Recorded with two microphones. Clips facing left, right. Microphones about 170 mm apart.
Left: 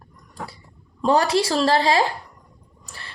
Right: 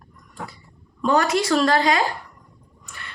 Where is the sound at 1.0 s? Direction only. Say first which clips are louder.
Left 1 dB; 30° left (ahead or behind).